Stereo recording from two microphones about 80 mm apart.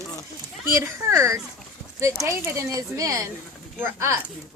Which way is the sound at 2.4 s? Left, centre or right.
Right.